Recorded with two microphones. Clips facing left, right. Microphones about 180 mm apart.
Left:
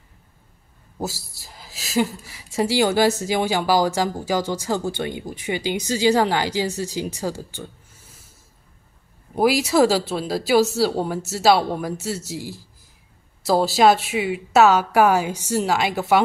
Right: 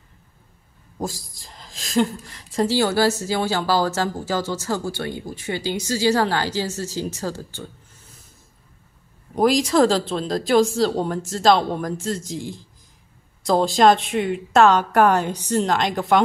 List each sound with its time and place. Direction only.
0.9 s a woman's voice: 10° left (ahead or behind)
9.3 s a woman's voice: 5° left (ahead or behind)